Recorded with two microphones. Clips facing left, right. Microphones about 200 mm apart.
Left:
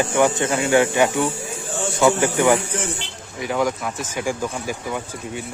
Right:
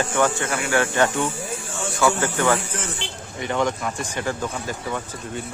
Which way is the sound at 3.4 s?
5° left (ahead or behind).